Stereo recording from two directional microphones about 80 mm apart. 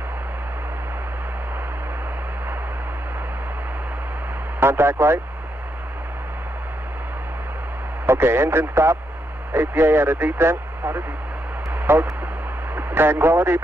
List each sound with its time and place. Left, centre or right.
4.6 s speech: right
8.1 s speech: right